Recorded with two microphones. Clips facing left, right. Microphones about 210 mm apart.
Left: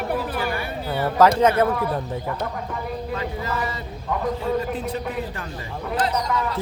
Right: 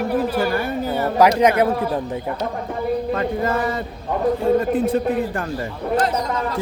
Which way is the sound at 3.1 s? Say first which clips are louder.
Right 7 dB; 50° right (ahead or behind).